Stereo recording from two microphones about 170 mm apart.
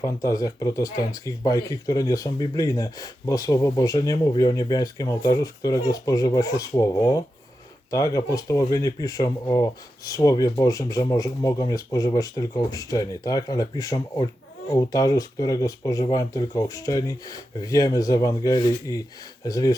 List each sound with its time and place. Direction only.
0.0 s speech: 20° left (ahead or behind)